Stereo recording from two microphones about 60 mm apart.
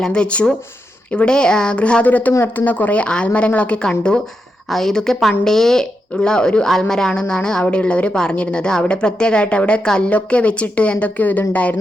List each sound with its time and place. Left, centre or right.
0.0 s speech: centre